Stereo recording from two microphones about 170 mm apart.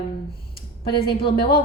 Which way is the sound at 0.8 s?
30° left (ahead or behind).